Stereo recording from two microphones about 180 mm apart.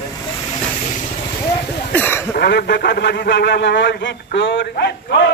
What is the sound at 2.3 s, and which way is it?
Speech, 65° left (ahead or behind).